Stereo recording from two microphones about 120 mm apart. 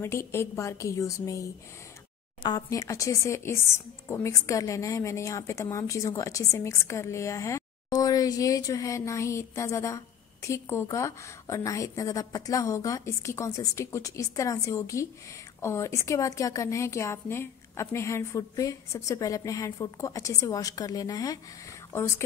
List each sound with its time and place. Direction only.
0.0 s a woman's voice: 20° left (ahead or behind)